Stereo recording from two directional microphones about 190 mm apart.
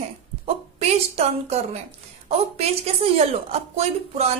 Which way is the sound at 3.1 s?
35° right (ahead or behind).